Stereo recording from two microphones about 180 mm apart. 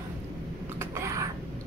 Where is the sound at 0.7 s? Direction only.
15° right (ahead or behind).